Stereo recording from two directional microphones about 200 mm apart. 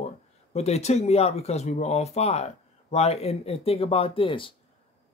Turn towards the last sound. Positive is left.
turn(degrees=25)  # may be behind; listen again after turning